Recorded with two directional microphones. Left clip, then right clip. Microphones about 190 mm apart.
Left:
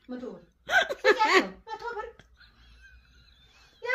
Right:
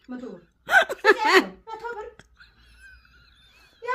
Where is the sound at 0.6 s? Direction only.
30° right (ahead or behind).